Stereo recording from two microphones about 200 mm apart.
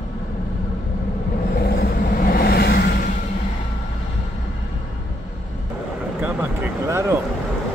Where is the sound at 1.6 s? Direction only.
50° left (ahead or behind).